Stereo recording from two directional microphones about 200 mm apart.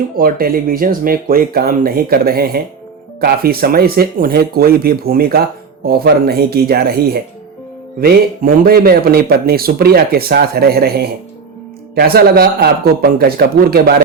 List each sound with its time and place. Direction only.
0.2 s speech: 45° right (ahead or behind)